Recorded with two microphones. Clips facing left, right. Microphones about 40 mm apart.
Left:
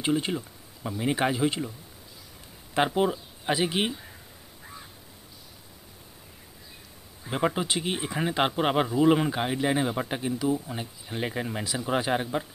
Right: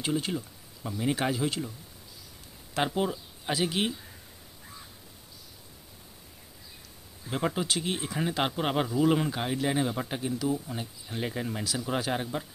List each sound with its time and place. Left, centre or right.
0.0 s speech: centre
2.7 s speech: centre
7.2 s speech: centre